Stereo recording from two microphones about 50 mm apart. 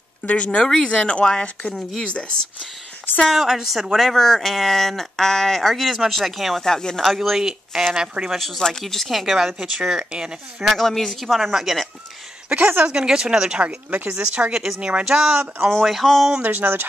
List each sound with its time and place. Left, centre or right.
0.3 s speech: left
1.8 s speech: centre
2.1 s speech: centre
3.3 s speech: centre
6.6 s speech: centre
7.2 s speech: centre
8.3 s speech: centre
9.2 s speech: centre
10.6 s speech: centre
12.5 s speech: centre
14.5 s speech: centre
14.8 s speech: right
15.8 s speech: centre
16.4 s speech: right